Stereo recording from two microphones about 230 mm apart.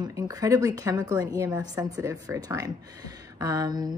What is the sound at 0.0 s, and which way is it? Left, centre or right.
Speech, centre.